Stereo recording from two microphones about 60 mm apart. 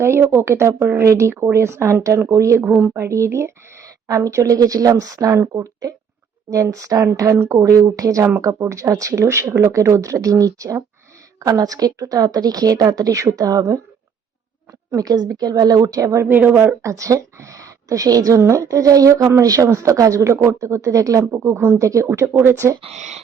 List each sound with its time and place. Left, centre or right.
0.0 s speech: right
1.0 s speech: right
2.6 s speech: right
2.9 s speech: right
6.5 s a woman's voice: right
11.3 s speech: right
14.8 s a woman's voice: right